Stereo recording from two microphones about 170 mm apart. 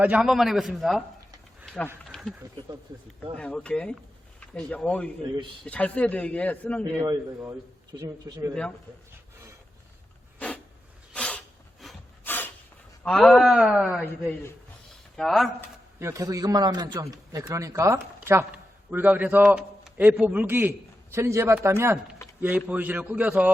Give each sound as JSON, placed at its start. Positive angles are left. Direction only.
{"t": 0.0, "sound": "a man's voice", "side_deg": -5}
{"t": 1.6, "sound": "a sound", "side_deg": 5}
{"t": 3.3, "sound": "speech", "side_deg": 5}
{"t": 7.0, "sound": "a man's voice", "side_deg": -20}
{"t": 11.1, "sound": "a sound", "side_deg": 5}
{"t": 13.0, "sound": "a man's voice", "side_deg": 5}
{"t": 14.0, "sound": "speech", "side_deg": 10}
{"t": 15.1, "sound": "speech", "side_deg": 0}
{"t": 16.0, "sound": "a man's voice", "side_deg": -15}